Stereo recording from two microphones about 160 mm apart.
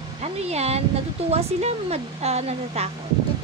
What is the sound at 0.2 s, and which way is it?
Speech, 40° right (ahead or behind).